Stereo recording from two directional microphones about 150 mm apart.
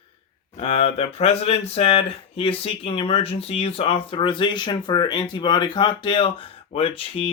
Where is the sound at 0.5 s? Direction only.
40° left (ahead or behind).